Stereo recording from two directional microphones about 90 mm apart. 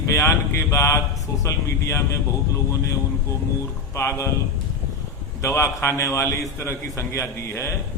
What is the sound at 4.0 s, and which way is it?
Speech, 35° left (ahead or behind).